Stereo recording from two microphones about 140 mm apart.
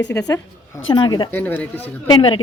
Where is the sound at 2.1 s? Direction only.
35° left (ahead or behind).